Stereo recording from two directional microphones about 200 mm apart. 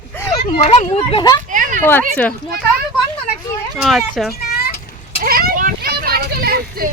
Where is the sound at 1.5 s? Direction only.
40° right (ahead or behind).